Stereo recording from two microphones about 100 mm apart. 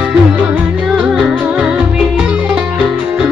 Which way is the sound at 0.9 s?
10° right (ahead or behind).